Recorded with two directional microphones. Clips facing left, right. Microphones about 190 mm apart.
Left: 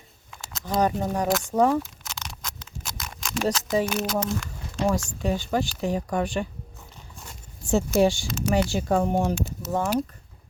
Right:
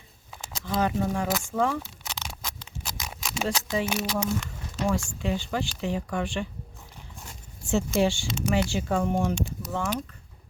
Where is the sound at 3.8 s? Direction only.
Centre (ahead or behind).